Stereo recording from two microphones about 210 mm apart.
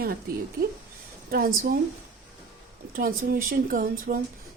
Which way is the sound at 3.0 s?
40° right (ahead or behind).